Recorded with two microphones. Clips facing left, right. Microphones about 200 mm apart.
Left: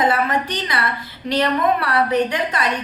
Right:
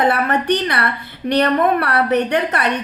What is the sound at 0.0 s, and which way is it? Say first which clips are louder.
A woman's voice: right 2 dB; 65° right (ahead or behind).